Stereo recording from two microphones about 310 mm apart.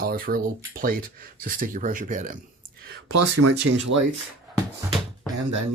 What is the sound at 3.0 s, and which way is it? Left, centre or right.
Speech, right.